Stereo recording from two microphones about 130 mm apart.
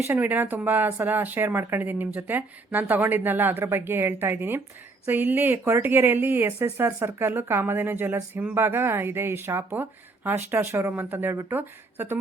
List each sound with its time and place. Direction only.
0.0 s speech: 15° right (ahead or behind)